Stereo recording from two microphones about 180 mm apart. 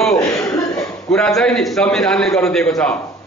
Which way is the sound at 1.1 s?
5° left (ahead or behind).